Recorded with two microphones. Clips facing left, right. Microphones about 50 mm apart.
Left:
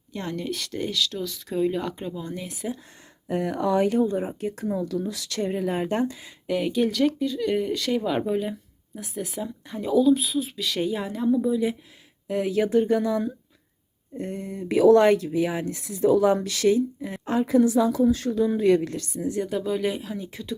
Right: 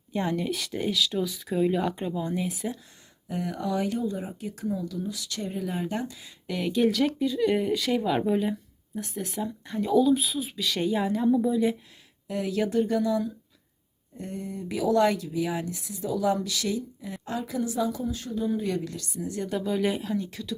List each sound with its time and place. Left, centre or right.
0.1 s speech: centre
3.2 s speech: left
4.4 s speech: left
5.4 s speech: left
6.5 s a woman's voice: centre
12.3 s speech: left
15.7 s a woman's voice: left
17.6 s a woman's voice: left
18.9 s speech: left
19.4 s a woman's voice: centre
20.1 s speech: left